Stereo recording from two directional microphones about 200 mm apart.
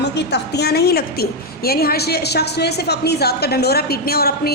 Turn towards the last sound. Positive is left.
turn(degrees=50)  # may be behind; listen again after turning